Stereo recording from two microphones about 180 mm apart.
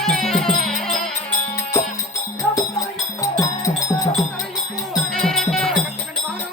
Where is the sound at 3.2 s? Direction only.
15° left (ahead or behind).